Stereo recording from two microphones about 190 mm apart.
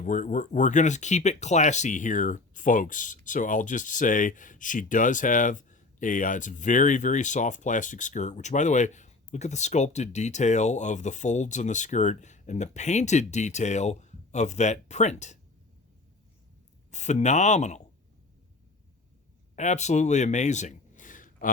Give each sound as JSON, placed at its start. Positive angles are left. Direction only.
{"t": 0.0, "sound": "speech", "side_deg": 45}
{"t": 16.9, "sound": "speech", "side_deg": 40}
{"t": 19.5, "sound": "speech", "side_deg": 40}